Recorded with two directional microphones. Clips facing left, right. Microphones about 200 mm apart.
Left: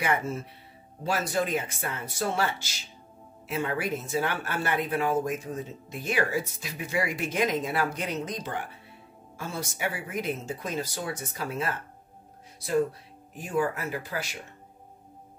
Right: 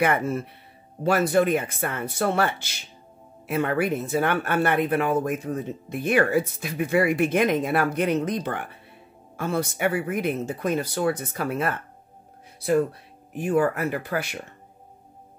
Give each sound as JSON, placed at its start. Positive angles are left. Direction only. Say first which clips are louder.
{"t": 0.0, "sound": "speech", "louder": "right 6 dB", "side_deg": -60}
{"t": 13.4, "sound": "speech", "louder": "right 6 dB", "side_deg": -60}